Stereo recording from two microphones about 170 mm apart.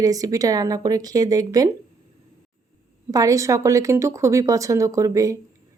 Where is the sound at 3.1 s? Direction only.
20° right (ahead or behind).